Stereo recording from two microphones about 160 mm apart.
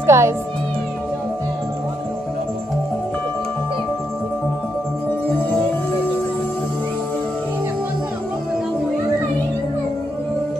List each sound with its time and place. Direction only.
0.0 s music: 15° right (ahead or behind)